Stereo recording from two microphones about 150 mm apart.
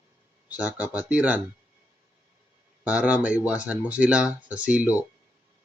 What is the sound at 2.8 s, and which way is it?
Speech, 10° right (ahead or behind).